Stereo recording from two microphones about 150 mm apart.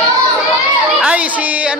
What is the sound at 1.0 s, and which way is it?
Speech, 10° right (ahead or behind).